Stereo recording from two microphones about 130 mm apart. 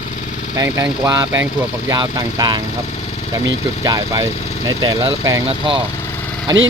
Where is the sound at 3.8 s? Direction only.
30° right (ahead or behind).